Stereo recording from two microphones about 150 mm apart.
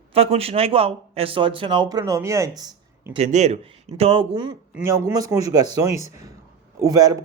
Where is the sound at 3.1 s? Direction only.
50° right (ahead or behind).